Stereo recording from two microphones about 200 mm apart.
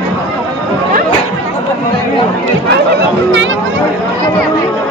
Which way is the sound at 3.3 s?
70° right (ahead or behind).